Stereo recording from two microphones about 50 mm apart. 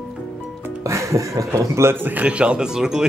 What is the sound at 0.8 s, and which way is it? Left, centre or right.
Speech, right.